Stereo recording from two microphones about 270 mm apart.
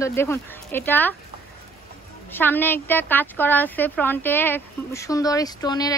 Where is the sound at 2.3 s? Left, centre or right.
Centre.